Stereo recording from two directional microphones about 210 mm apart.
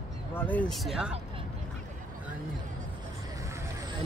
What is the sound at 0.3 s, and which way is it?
Speech, 10° left (ahead or behind).